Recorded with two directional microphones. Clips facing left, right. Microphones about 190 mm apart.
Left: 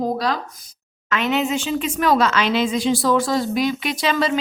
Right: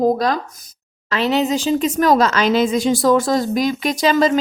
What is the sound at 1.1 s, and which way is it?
Speech, 35° right (ahead or behind).